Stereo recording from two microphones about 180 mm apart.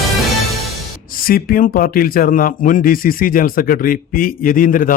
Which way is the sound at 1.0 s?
55° left (ahead or behind).